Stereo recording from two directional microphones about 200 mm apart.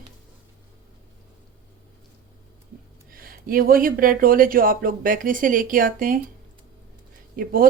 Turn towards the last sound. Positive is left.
turn(degrees=-45)  # may be behind; listen again after turning